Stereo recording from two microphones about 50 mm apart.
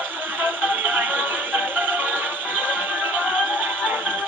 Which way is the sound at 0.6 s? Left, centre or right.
Right.